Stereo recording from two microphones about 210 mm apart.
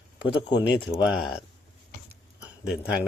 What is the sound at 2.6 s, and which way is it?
Speech, 5° right (ahead or behind).